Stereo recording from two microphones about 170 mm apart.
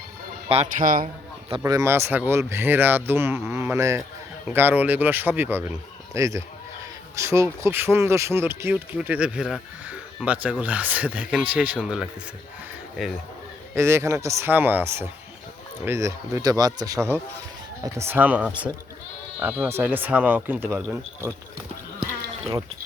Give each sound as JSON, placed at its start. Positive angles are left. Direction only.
{"t": 0.4, "sound": "speech", "side_deg": -35}
{"t": 0.8, "sound": "a man's voice", "side_deg": -55}
{"t": 1.0, "sound": "a sound", "side_deg": -30}
{"t": 1.6, "sound": "speech", "side_deg": -20}
{"t": 13.7, "sound": "speech", "side_deg": -15}